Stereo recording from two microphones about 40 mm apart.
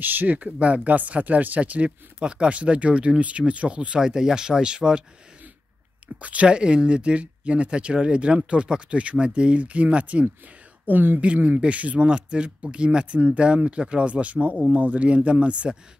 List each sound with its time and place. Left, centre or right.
0.0 s speech: right
0.6 s speech: right
2.1 s speech: right
4.0 s speech: centre
6.2 s speech: right
6.5 s speech: right
10.9 s speech: right
11.3 s speech: right